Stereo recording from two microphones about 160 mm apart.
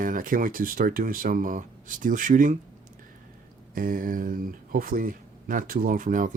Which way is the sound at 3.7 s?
60° right (ahead or behind).